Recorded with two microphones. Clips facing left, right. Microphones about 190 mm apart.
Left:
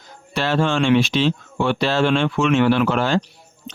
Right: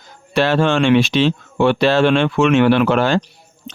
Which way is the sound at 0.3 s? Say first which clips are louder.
Right 4 dB; 65° right (ahead or behind).